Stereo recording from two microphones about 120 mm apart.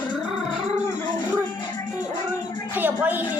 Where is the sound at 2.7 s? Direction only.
15° right (ahead or behind).